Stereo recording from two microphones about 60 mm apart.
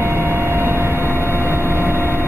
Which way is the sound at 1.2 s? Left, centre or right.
Left.